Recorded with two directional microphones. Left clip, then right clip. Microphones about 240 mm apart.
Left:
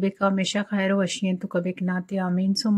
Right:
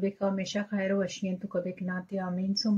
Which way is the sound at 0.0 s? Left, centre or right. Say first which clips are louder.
Left 7 dB; left.